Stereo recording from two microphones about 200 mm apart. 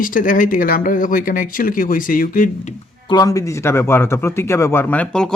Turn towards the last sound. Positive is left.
turn(degrees=5)  # may be behind; listen again after turning